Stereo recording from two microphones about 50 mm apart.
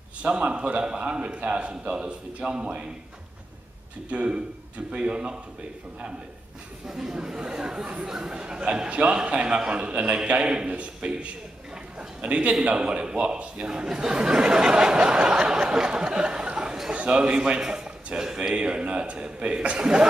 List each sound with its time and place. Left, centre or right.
0.2 s speech: right
4.1 s speech: right
6.9 s a man's voice: centre